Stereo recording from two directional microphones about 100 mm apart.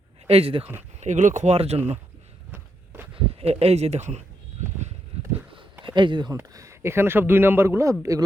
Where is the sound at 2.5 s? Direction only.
20° right (ahead or behind).